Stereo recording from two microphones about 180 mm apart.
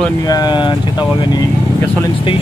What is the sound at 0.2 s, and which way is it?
Speech, 20° left (ahead or behind).